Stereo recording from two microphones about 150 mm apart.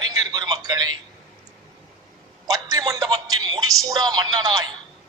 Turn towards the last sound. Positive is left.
turn(degrees=-25)  # may be behind; listen again after turning